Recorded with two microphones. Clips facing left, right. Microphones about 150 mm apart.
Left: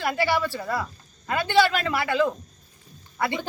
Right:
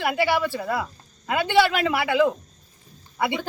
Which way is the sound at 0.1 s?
20° right (ahead or behind).